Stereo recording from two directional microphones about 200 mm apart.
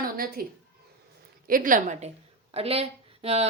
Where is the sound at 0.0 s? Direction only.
45° right (ahead or behind).